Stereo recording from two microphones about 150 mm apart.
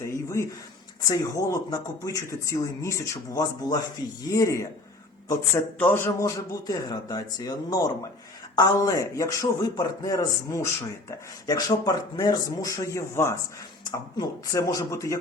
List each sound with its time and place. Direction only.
0.0 s a sound: 20° left (ahead or behind)
1.0 s speech: 20° left (ahead or behind)
5.8 s speech: 15° left (ahead or behind)